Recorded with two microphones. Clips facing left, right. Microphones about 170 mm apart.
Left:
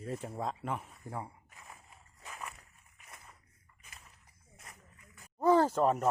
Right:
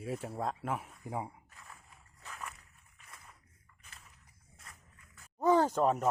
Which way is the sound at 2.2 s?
15° left (ahead or behind).